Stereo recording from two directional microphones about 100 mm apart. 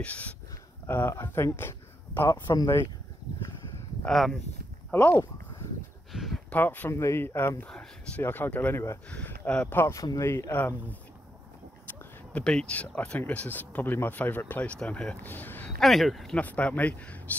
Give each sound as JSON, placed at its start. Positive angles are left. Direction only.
{"t": 0.0, "sound": "speech", "side_deg": 15}
{"t": 2.4, "sound": "speech", "side_deg": 40}
{"t": 4.0, "sound": "speech", "side_deg": 5}
{"t": 4.9, "sound": "a sound", "side_deg": 20}
{"t": 6.1, "sound": "a sound", "side_deg": 0}
{"t": 6.5, "sound": "speech", "side_deg": 15}
{"t": 6.9, "sound": "speech", "side_deg": 30}
{"t": 15.8, "sound": "speech", "side_deg": 0}
{"t": 16.3, "sound": "speech", "side_deg": 15}